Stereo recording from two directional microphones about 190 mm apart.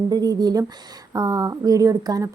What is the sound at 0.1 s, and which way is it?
Speech, 20° right (ahead or behind).